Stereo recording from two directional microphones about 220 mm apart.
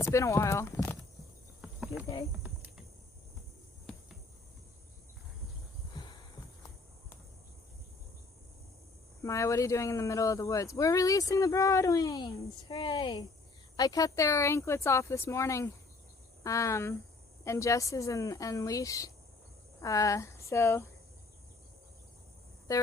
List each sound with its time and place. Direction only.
0.0 s speech: 15° left (ahead or behind)
1.6 s cricket: centre (ahead or behind)
5.9 s a sound: 20° left (ahead or behind)
9.2 s speech: 15° left (ahead or behind)
22.7 s speech: 15° left (ahead or behind)